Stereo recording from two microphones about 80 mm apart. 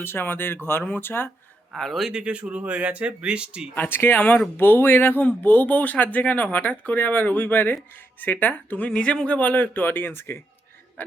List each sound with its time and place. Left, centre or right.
0.0 s speech: left
1.7 s speech: centre
2.2 s speech: centre
3.8 s speech: left